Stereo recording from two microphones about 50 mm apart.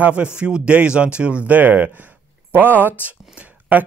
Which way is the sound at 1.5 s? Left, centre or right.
Right.